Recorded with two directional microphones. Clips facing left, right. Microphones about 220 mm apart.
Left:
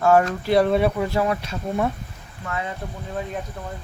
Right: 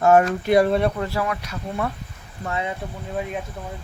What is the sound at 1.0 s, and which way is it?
Speech, 25° left (ahead or behind).